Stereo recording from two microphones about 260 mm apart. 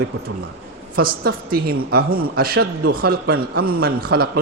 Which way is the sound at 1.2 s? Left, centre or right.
Right.